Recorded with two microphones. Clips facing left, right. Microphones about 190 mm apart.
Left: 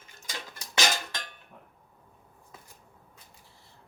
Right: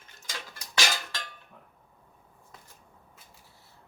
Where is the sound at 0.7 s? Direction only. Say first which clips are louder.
Left 2 dB; 20° left (ahead or behind).